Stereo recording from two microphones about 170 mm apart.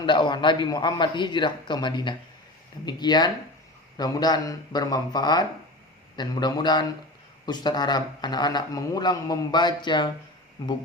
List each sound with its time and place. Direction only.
0.0 s a man's voice: 30° left (ahead or behind)